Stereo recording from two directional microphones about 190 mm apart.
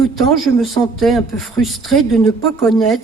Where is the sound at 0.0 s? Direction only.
Centre (ahead or behind).